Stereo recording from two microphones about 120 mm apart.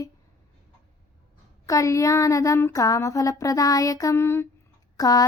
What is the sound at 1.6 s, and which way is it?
Speech, 25° left (ahead or behind).